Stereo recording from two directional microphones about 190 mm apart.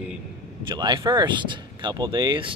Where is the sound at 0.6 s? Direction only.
25° right (ahead or behind).